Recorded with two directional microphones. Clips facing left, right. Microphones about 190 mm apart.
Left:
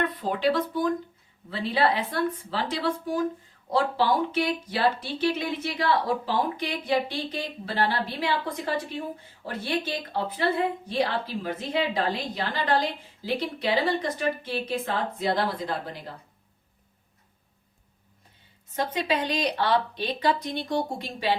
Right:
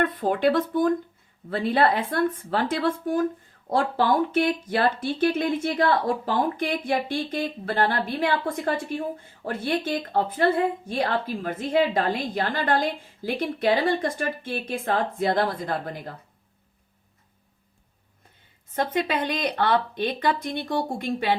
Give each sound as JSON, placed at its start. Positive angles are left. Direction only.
{"t": 0.0, "sound": "speech", "side_deg": -50}
{"t": 18.8, "sound": "speech", "side_deg": -50}